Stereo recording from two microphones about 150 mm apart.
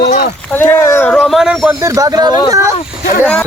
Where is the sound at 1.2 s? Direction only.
5° right (ahead or behind).